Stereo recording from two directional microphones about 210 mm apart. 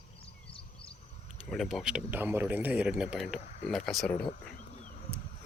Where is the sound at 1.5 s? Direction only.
Centre (ahead or behind).